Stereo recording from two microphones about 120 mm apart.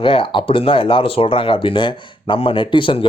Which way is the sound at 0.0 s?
45° left (ahead or behind).